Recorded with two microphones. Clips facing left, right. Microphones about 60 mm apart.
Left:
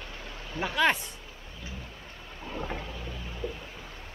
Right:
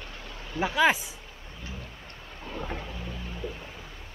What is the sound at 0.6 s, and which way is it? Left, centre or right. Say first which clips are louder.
Speech: right 3 dB; centre.